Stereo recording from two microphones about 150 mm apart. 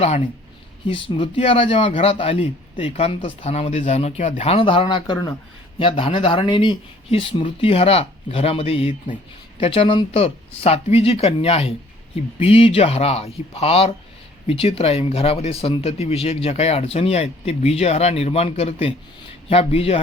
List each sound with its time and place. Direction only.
0.9 s a man's voice: 35° left (ahead or behind); by 4.4 s 50° left (ahead or behind)
4.4 s a man's voice: 40° left (ahead or behind)